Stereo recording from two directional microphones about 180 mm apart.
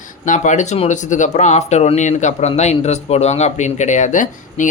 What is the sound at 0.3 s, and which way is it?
Speech, 45° left (ahead or behind).